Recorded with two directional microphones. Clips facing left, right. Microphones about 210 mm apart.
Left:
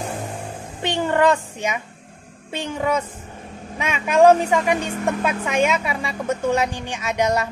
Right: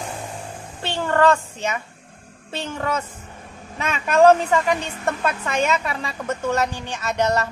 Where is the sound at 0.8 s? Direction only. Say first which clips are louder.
Even; 15° left (ahead or behind).